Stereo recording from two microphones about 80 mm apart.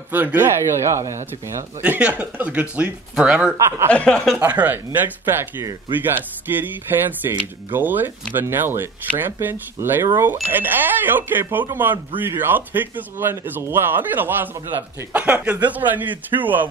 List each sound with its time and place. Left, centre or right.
0.1 s speech: right
0.6 s speech: right
1.8 s speech: centre
3.5 s speech: right
3.9 s speech: centre
4.6 s speech: right